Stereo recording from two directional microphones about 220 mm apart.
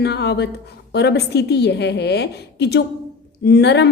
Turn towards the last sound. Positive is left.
turn(degrees=50)  # may be behind; listen again after turning